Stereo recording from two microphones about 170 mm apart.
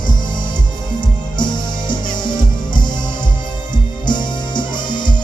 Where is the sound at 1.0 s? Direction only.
25° left (ahead or behind).